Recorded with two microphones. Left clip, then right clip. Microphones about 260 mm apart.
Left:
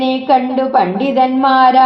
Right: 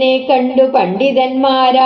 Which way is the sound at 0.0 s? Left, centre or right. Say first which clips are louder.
Right 1 dB; left.